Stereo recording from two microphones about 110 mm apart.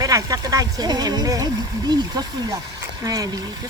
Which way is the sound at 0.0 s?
30° right (ahead or behind).